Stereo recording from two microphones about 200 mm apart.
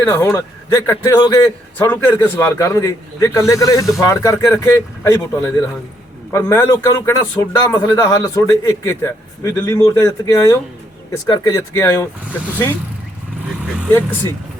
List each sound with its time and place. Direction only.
0.0 s speech: 10° left (ahead or behind)